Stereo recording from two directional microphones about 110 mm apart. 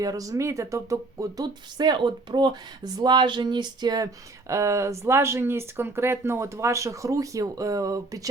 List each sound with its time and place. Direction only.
0.0 s speech: 30° right (ahead or behind)